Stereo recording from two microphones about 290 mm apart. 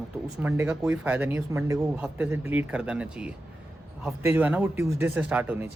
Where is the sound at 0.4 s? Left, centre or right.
Centre.